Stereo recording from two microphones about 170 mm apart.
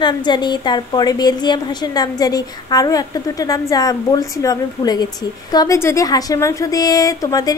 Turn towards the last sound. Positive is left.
turn(degrees=20)  # may be behind; listen again after turning